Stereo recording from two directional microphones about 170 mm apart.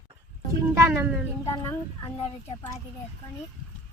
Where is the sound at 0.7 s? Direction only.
15° right (ahead or behind).